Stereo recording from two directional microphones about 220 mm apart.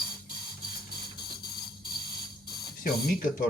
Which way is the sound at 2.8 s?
40° left (ahead or behind).